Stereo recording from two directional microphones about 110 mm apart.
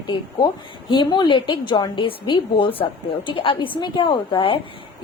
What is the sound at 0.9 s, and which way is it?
A woman's voice, 45° left (ahead or behind).